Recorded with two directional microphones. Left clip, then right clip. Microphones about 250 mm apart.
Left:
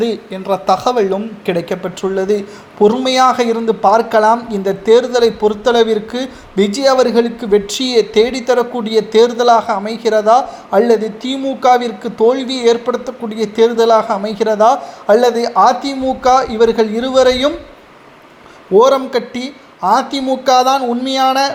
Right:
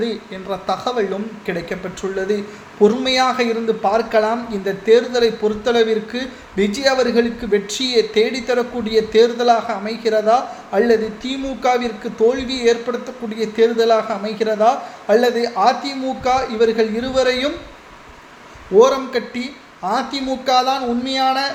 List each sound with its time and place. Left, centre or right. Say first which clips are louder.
0.0 s speech: left 6 dB; left
18.7 s speech: left 3 dB; left